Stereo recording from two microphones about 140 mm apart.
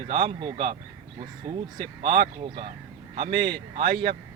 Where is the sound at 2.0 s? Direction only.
35° right (ahead or behind).